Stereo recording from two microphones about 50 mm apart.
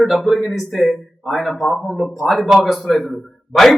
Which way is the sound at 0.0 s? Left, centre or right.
Centre.